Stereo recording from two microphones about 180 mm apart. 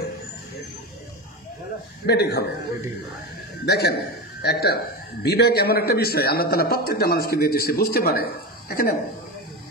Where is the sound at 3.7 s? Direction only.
65° left (ahead or behind).